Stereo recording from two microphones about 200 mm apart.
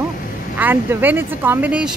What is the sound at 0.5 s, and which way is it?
Speech, 10° right (ahead or behind).